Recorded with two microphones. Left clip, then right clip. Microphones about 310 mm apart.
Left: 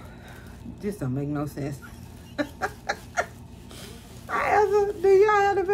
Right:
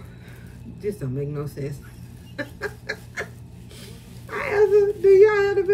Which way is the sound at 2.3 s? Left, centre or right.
Centre.